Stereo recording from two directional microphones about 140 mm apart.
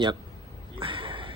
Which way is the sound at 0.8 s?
35° right (ahead or behind).